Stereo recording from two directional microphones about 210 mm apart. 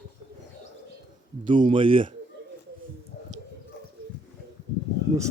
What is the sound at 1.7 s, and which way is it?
Speech, 25° right (ahead or behind).